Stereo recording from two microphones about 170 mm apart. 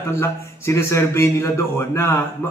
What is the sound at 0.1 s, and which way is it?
A man's voice, 15° left (ahead or behind).